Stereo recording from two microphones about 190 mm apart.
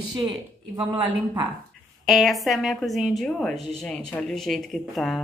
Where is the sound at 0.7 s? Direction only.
25° right (ahead or behind).